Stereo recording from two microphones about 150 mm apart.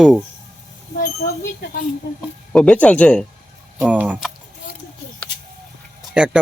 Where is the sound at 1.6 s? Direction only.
90° left.